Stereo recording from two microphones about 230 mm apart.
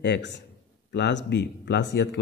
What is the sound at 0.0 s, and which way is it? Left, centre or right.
A man's voice, left.